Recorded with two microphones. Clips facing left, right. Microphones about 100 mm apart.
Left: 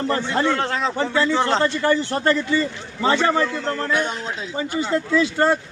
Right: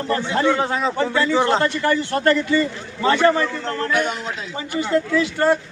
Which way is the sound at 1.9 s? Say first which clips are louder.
Right 3 dB; 25° left (ahead or behind).